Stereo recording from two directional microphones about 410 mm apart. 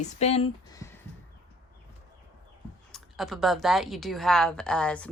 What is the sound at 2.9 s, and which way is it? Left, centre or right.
Speech, centre.